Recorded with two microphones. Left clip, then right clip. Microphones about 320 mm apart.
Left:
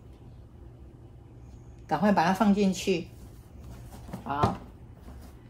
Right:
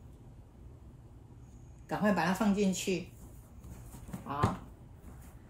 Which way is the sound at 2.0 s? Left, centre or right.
Left.